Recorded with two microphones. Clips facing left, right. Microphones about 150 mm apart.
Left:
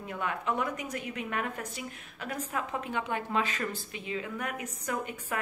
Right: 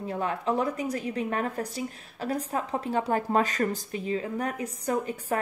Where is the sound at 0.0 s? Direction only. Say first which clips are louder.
Right 5 dB; 30° right (ahead or behind).